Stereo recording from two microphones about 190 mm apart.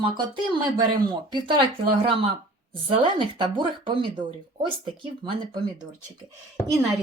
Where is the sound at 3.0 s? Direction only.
25° right (ahead or behind).